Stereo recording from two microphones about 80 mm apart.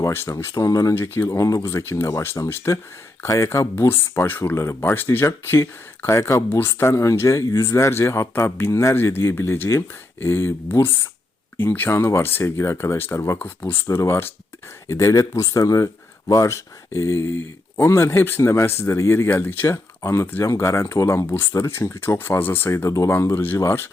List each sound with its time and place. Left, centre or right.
0.0 s speech: left
0.9 s speech: left
1.4 s speech: left
13.4 s speech: left
13.8 s speech: left